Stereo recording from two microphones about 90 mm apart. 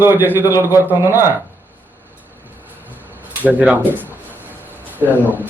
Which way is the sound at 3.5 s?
5° right (ahead or behind).